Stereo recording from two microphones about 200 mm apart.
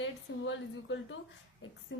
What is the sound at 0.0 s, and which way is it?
A woman's voice, 70° left (ahead or behind).